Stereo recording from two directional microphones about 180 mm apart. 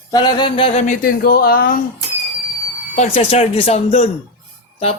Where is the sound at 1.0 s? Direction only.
55° left (ahead or behind).